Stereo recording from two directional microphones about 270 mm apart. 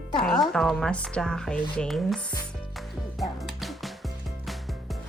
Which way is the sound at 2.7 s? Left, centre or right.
Centre.